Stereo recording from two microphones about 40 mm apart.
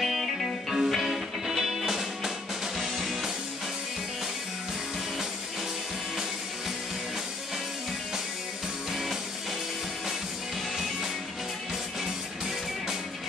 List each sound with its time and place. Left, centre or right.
0.0 s music: centre